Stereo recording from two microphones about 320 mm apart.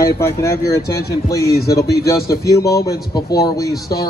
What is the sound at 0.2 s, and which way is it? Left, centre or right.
A man's voice, centre.